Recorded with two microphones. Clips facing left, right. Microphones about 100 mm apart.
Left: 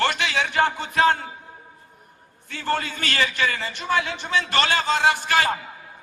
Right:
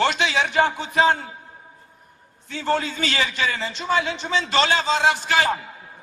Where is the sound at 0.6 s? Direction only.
15° right (ahead or behind).